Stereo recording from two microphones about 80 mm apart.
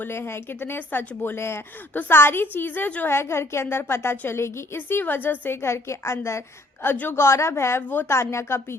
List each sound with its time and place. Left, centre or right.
0.0 s a woman's voice: left
6.8 s a woman's voice: left
7.2 s a woman's voice: left
8.1 s a woman's voice: left